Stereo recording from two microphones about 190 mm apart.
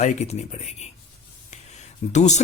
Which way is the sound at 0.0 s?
35° left (ahead or behind).